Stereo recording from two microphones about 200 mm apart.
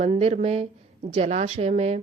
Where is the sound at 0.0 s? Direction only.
30° right (ahead or behind).